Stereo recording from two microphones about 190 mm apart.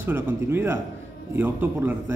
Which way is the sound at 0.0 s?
10° right (ahead or behind).